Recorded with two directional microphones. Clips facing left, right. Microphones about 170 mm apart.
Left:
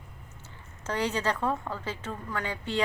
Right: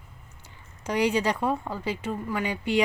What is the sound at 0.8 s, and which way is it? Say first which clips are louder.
Speech: right 5 dB; 15° right (ahead or behind).